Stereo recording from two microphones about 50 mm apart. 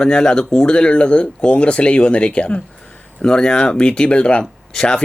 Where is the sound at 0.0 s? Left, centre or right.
Centre.